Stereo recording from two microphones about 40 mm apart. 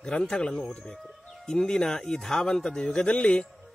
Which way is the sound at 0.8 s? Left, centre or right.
Centre.